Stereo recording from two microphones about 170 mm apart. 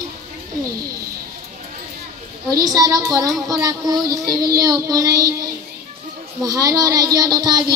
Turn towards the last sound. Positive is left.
turn(degrees=-25)  # may be behind; listen again after turning